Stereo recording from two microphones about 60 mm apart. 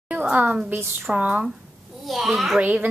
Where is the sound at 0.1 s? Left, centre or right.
Right.